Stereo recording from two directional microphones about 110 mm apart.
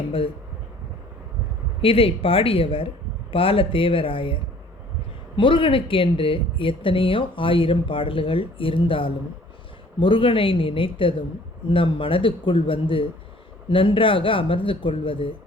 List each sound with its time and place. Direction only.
1.8 s speech: 55° left (ahead or behind)
5.4 s speech: 50° left (ahead or behind)